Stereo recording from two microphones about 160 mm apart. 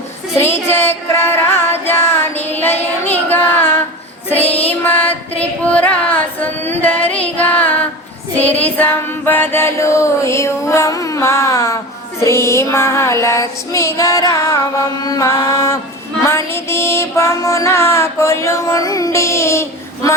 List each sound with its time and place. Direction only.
0.3 s child singing: 15° left (ahead or behind)
4.4 s music: 40° left (ahead or behind)
4.7 s music: 10° left (ahead or behind)
5.4 s child singing: 10° left (ahead or behind)